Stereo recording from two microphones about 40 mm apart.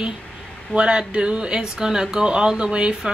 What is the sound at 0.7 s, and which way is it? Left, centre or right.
Speech, right.